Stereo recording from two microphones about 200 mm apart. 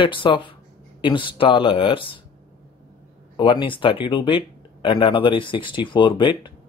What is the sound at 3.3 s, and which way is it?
Speech, 25° left (ahead or behind).